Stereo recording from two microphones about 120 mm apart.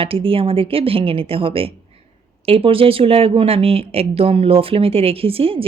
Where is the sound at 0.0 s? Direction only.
50° right (ahead or behind).